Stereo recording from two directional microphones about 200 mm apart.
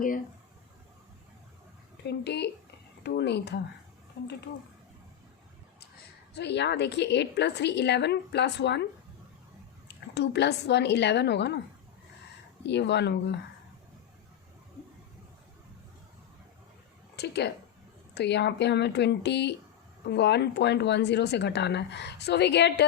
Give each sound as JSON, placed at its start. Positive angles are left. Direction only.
{"t": 2.0, "sound": "speech", "side_deg": 60}
{"t": 6.3, "sound": "speech", "side_deg": 60}
{"t": 10.2, "sound": "speech", "side_deg": 60}
{"t": 12.6, "sound": "speech", "side_deg": 60}
{"t": 17.2, "sound": "speech", "side_deg": 55}